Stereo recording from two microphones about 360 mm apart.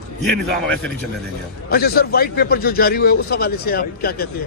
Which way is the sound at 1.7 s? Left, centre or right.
Left.